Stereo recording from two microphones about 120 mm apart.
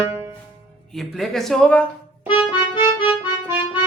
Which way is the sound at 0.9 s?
Centre (ahead or behind).